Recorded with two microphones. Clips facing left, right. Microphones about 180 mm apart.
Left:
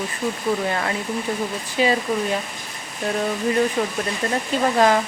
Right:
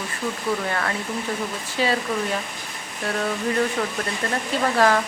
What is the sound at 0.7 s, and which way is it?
Speech, 20° left (ahead or behind).